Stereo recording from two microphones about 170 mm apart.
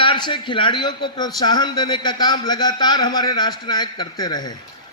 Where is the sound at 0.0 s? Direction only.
30° left (ahead or behind).